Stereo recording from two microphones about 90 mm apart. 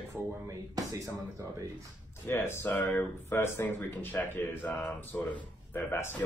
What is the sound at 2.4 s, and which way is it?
Speech, 20° left (ahead or behind).